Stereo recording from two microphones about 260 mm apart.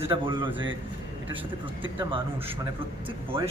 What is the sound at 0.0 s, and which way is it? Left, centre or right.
Speech, centre.